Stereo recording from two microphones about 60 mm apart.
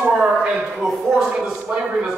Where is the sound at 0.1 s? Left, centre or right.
Centre.